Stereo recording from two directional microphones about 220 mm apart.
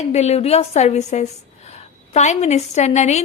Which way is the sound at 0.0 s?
30° left (ahead or behind).